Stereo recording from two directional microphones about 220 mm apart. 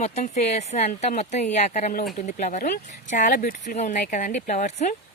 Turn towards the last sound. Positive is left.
turn(degrees=35)  # may be behind; listen again after turning